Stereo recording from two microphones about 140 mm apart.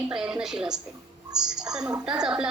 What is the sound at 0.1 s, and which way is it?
A woman's voice, 5° right (ahead or behind).